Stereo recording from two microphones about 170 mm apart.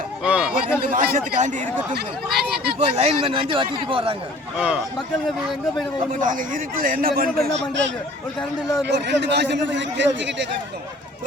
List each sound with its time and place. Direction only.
0.2 s a sound: 5° right (ahead or behind)
0.8 s a man's voice: 50° right (ahead or behind)
2.0 s speech: 70° right (ahead or behind)
3.0 s a man's voice: 35° right (ahead or behind)
4.5 s speech: 5° right (ahead or behind)
6.1 s a man's voice: 50° right (ahead or behind)
7.3 s a man's voice: 90° right